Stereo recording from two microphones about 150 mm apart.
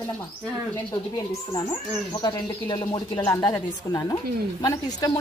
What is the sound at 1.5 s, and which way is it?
Speech, 25° left (ahead or behind).